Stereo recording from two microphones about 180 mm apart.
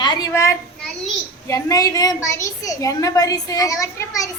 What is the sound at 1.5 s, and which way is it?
A woman's voice, 15° left (ahead or behind).